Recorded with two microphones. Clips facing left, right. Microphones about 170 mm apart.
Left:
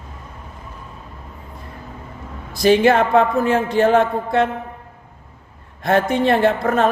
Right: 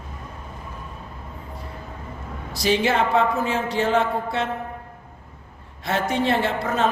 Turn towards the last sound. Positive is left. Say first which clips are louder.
# left 6 dB
turn(degrees=50)  # may be behind; listen again after turning